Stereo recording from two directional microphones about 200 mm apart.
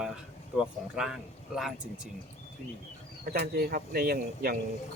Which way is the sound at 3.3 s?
50° right (ahead or behind).